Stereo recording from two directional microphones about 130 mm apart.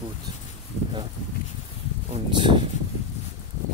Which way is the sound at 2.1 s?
40° right (ahead or behind).